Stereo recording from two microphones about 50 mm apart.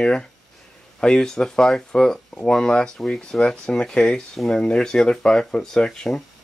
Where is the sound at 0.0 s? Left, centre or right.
Centre.